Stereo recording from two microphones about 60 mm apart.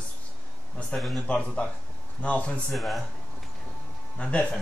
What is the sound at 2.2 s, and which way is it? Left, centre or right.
Speech, left.